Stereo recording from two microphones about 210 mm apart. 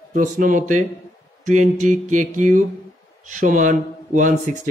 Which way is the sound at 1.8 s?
35° right (ahead or behind).